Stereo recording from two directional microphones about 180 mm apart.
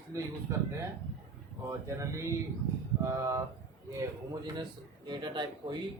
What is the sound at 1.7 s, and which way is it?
A man's voice, 15° right (ahead or behind).